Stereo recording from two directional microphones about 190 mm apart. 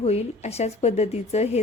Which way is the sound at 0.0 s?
35° left (ahead or behind).